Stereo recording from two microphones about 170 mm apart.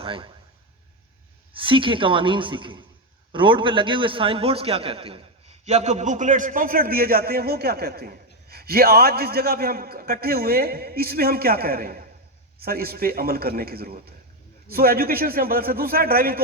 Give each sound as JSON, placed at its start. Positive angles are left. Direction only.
{"t": 0.0, "sound": "a man's voice", "side_deg": -30}
{"t": 1.5, "sound": "a woman's voice", "side_deg": -30}